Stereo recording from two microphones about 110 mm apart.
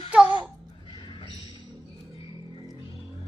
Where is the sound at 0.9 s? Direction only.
50° left (ahead or behind).